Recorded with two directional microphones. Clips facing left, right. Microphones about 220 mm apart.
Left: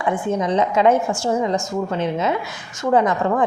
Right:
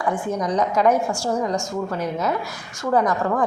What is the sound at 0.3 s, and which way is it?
Speech, 25° left (ahead or behind).